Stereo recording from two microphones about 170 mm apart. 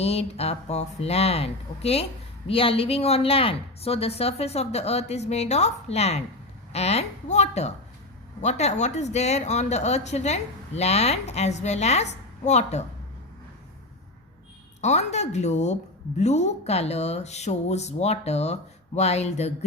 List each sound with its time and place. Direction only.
0.0 s a woman's voice: 35° left (ahead or behind)
14.8 s a woman's voice: 40° left (ahead or behind)